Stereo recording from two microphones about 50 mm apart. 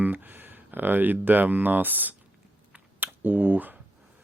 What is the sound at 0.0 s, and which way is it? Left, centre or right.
Speech, right.